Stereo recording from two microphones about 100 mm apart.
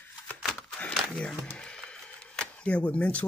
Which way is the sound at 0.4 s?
Centre (ahead or behind).